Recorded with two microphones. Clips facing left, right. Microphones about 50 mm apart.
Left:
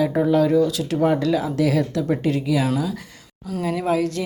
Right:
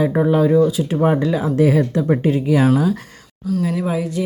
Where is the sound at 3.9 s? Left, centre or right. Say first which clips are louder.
Left 1 dB; centre.